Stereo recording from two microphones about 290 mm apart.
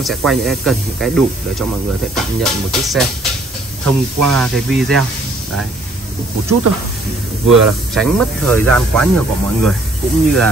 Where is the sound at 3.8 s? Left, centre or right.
Right.